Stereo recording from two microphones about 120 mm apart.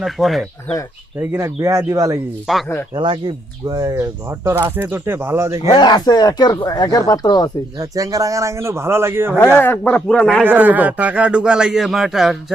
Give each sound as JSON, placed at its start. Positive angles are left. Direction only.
{"t": 0.0, "sound": "speech", "side_deg": 0}
{"t": 1.2, "sound": "speech", "side_deg": -20}
{"t": 2.5, "sound": "speech", "side_deg": 0}
{"t": 2.9, "sound": "speech", "side_deg": -40}
{"t": 5.7, "sound": "speech", "side_deg": 35}
{"t": 7.8, "sound": "speech", "side_deg": -30}
{"t": 9.6, "sound": "speech", "side_deg": 15}
{"t": 10.4, "sound": "a man's voice", "side_deg": -15}